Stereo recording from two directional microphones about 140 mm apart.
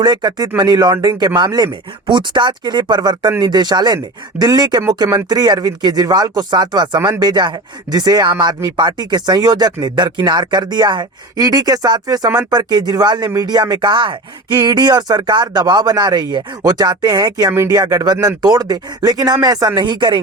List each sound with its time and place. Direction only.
0.0 s speech: 30° right (ahead or behind)